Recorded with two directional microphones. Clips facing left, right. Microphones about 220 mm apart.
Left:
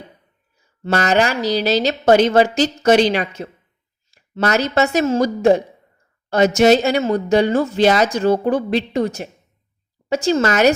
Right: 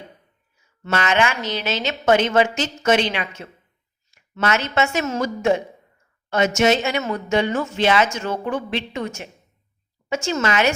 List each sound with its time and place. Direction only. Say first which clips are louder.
0.6 s speech: left 4 dB; 35° left (ahead or behind)